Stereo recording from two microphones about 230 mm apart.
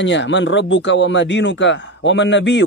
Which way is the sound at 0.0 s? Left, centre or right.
Left.